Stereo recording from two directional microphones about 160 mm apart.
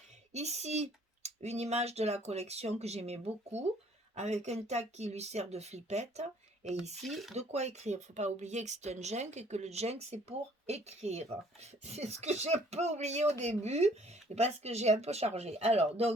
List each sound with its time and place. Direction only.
0.3 s speech: 45° right (ahead or behind)
7.0 s speech: centre (ahead or behind)
7.3 s speech: 45° right (ahead or behind)